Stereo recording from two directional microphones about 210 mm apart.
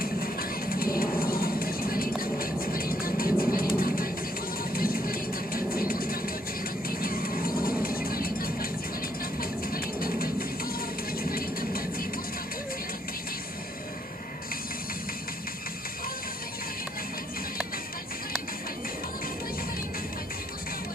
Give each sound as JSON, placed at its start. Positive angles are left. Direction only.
{"t": 0.0, "sound": "music", "side_deg": 45}